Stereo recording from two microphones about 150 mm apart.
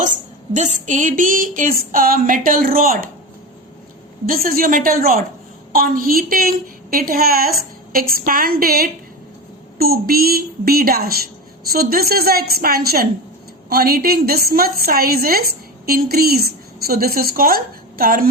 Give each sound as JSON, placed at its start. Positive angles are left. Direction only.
{"t": 0.5, "sound": "a woman's voice", "side_deg": -55}
{"t": 4.3, "sound": "a woman's voice", "side_deg": -75}
{"t": 7.9, "sound": "a woman's voice", "side_deg": -75}